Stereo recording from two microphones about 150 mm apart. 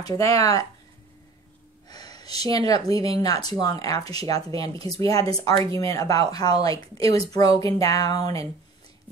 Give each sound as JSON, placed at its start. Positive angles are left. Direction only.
{"t": 0.0, "sound": "speech", "side_deg": 25}
{"t": 1.9, "sound": "a sound", "side_deg": 25}
{"t": 3.2, "sound": "speech", "side_deg": 25}